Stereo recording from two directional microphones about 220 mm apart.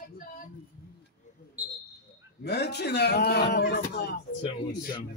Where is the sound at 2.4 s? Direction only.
50° left (ahead or behind).